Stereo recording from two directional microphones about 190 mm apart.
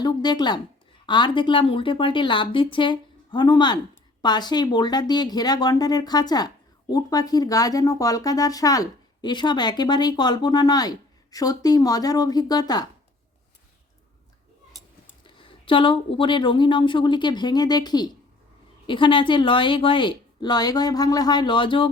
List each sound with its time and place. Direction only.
0.0 s speech: 20° left (ahead or behind)
15.2 s speech: 25° left (ahead or behind)